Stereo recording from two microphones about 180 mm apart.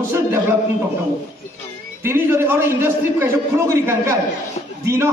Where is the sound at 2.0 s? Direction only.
15° right (ahead or behind).